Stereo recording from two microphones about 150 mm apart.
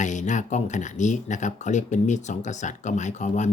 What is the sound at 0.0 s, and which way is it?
Speech, 55° left (ahead or behind).